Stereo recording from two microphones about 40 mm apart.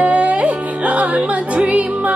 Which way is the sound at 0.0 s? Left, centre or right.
Right.